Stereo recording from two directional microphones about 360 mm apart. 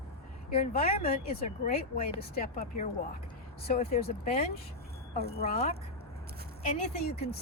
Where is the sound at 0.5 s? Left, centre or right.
Left.